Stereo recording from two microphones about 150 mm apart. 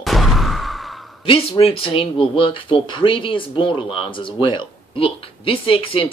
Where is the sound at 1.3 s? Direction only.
40° left (ahead or behind).